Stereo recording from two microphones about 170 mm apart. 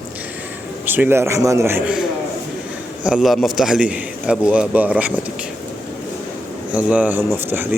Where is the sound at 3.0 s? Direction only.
5° right (ahead or behind).